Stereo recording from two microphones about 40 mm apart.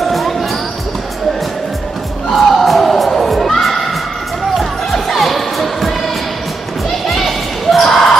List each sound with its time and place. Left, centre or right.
0.0 s music: centre
2.3 s a sound: centre
4.6 s music: centre
7.1 s basketball bounce: centre